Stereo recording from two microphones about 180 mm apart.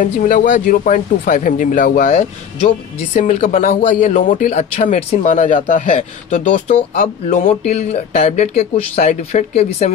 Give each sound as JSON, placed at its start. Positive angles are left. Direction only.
{"t": 0.0, "sound": "speech", "side_deg": 50}